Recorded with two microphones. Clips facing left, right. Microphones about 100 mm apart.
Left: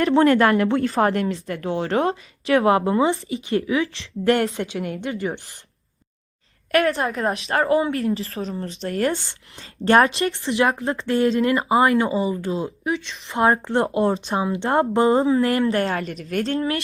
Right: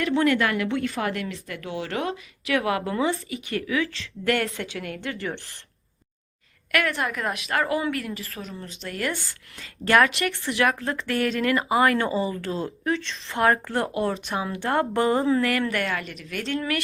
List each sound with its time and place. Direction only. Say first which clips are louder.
0.0 s speech: left 6 dB; 40° left (ahead or behind); by 5.1 s 20° left (ahead or behind)
6.7 s speech: left 5 dB; 35° left (ahead or behind); by 12.9 s 15° left (ahead or behind)
13.2 s speech: left 3 dB; 25° left (ahead or behind)